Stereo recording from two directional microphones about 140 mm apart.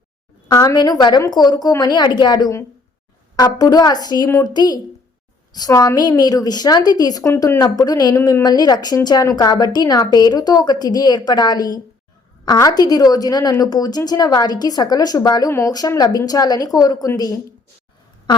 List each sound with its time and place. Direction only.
0.4 s speech: 30° left (ahead or behind)
4.3 s a woman's voice: 20° left (ahead or behind)
4.5 s speech: 30° left (ahead or behind)